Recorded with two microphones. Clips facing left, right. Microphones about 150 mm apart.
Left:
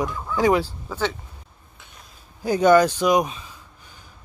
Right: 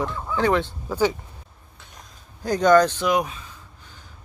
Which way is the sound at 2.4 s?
10° left (ahead or behind).